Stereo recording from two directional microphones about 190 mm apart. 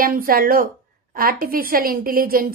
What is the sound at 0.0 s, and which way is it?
A woman's voice, 50° right (ahead or behind).